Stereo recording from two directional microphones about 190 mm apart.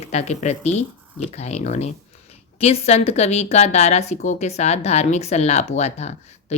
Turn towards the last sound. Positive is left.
turn(degrees=35)  # may be behind; listen again after turning